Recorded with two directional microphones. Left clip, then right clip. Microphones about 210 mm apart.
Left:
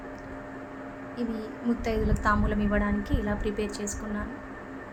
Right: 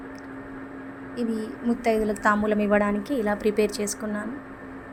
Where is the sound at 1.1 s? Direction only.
20° right (ahead or behind).